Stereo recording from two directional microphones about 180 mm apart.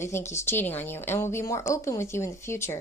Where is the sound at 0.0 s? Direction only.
15° left (ahead or behind).